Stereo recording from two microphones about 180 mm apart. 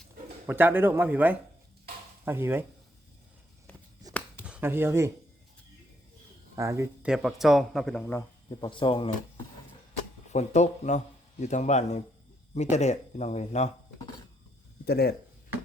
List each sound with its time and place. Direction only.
0.4 s speech: 10° right (ahead or behind)
4.1 s a sound: 20° right (ahead or behind)
4.4 s speech: 10° right (ahead or behind)
6.6 s speech: 15° right (ahead or behind)
7.1 s speech: centre (ahead or behind)
8.4 s speech: 25° left (ahead or behind)
10.3 s a man's voice: 40° left (ahead or behind)
14.8 s speech: 60° left (ahead or behind)